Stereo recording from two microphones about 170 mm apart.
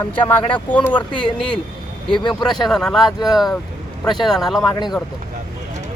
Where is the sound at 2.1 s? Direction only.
25° left (ahead or behind).